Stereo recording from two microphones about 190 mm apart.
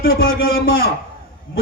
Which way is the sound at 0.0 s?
50° left (ahead or behind).